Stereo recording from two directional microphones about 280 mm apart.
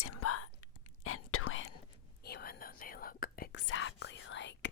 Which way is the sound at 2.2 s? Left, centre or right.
Left.